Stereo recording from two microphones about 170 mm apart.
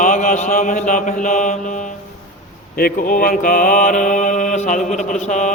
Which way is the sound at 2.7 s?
60° left (ahead or behind).